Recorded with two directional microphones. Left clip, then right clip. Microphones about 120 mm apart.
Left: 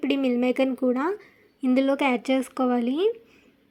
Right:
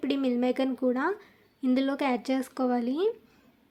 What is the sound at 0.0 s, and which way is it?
Speech, 25° left (ahead or behind).